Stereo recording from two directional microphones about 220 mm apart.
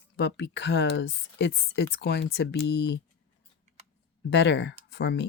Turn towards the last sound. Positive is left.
turn(degrees=50)  # may be behind; listen again after turning